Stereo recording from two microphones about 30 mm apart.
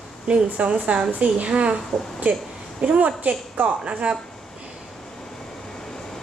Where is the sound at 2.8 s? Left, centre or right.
Right.